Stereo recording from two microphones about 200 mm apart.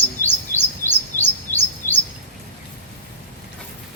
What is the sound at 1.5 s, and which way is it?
Bird vocalization, 15° right (ahead or behind).